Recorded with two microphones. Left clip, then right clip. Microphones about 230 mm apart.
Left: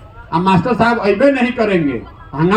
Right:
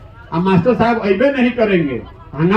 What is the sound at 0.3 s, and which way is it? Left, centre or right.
A man's voice, left.